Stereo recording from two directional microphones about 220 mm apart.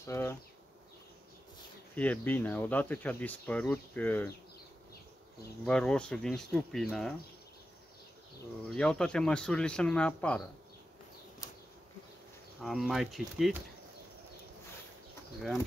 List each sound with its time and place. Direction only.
0.0 s speech: 10° left (ahead or behind)
2.0 s speech: 5° left (ahead or behind)
5.7 s speech: 5° left (ahead or behind)
8.6 s speech: 5° left (ahead or behind)
12.5 s speech: centre (ahead or behind)